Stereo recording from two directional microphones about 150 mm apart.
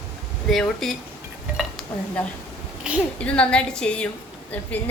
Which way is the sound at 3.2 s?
10° left (ahead or behind).